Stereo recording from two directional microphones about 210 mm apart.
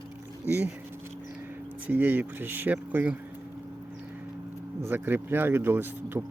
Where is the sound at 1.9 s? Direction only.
10° right (ahead or behind).